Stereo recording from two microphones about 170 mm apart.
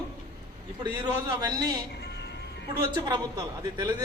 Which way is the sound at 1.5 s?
25° right (ahead or behind).